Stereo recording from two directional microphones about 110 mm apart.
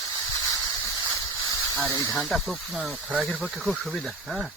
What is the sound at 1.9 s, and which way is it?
Speech, 30° left (ahead or behind).